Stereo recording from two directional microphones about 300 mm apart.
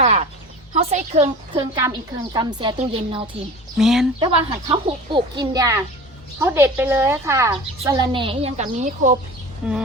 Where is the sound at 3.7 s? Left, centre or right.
Centre.